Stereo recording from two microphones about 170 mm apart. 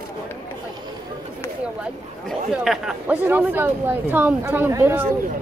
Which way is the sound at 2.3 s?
5° right (ahead or behind).